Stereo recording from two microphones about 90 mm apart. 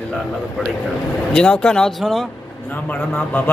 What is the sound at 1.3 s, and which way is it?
Speech, 10° left (ahead or behind).